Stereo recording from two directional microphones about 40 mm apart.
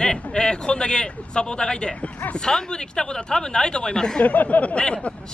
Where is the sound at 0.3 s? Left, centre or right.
Left.